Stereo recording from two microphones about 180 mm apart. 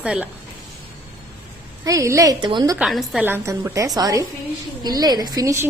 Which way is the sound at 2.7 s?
Centre (ahead or behind).